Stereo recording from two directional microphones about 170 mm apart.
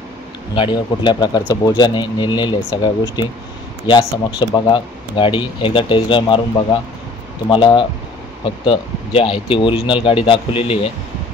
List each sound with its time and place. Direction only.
0.6 s speech: 25° left (ahead or behind)